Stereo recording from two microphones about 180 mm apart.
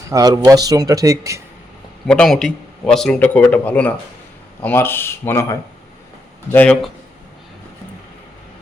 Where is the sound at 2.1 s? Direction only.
5° left (ahead or behind).